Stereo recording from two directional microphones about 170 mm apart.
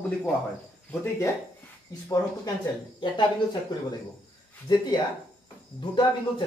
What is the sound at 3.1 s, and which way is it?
Speech, 25° left (ahead or behind).